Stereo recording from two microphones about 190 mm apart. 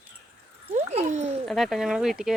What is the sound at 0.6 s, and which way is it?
Dog, 35° right (ahead or behind).